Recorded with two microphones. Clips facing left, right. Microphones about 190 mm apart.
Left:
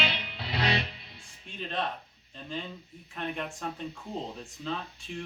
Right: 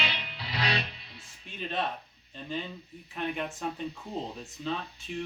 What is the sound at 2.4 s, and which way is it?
Speech, centre (ahead or behind).